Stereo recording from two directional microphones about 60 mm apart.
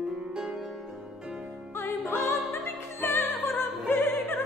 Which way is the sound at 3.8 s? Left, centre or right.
Left.